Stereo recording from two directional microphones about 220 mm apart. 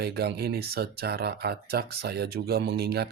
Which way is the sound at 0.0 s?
45° right (ahead or behind).